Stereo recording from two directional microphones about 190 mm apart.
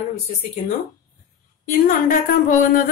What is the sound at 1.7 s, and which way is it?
Speech, 50° left (ahead or behind).